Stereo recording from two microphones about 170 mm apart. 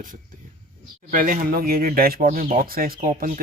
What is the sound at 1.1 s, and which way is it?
Speech, 55° right (ahead or behind).